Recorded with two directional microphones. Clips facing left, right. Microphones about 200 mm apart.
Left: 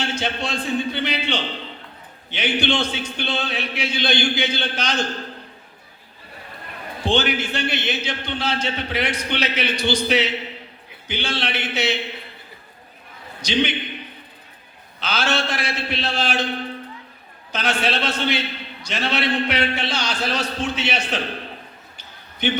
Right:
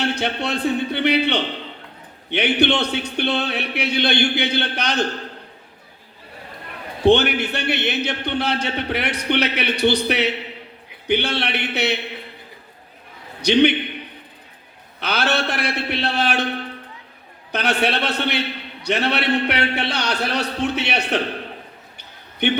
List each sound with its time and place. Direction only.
0.0 s a man's voice: 60° right (ahead or behind)
7.0 s a man's voice: 60° right (ahead or behind)
13.4 s a man's voice: 60° right (ahead or behind)
15.0 s a man's voice: 60° right (ahead or behind)
17.5 s a man's voice: 60° right (ahead or behind)
21.9 s basketball bounce: 60° right (ahead or behind)